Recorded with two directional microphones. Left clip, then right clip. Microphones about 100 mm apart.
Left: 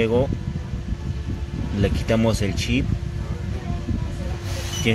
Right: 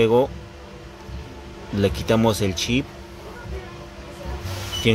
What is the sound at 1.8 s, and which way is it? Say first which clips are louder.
Speech: right 2 dB; 35° right (ahead or behind).